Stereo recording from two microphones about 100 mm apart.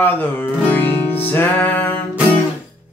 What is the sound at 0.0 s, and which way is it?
Music, 20° left (ahead or behind).